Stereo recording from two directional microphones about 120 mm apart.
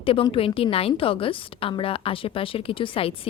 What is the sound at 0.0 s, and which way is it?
A woman's voice, 50° left (ahead or behind).